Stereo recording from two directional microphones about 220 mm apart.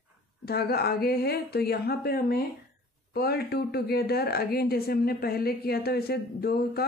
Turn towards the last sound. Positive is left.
turn(degrees=45)  # may be behind; listen again after turning